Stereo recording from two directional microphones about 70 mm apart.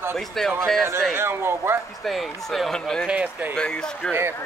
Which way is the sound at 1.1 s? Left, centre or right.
Right.